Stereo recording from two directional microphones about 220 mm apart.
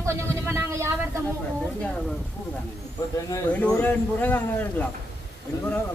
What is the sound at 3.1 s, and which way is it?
Speech, 10° left (ahead or behind).